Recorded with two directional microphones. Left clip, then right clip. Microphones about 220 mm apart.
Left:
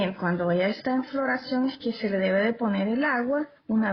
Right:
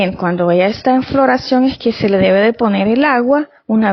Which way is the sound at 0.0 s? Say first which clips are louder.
Right 12 dB; 40° right (ahead or behind).